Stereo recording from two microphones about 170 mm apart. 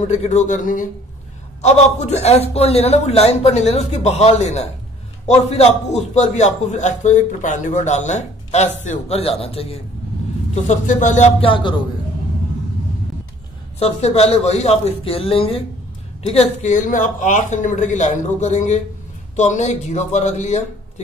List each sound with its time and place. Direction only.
0.0 s a man's voice: 40° left (ahead or behind)
13.7 s a man's voice: 35° left (ahead or behind)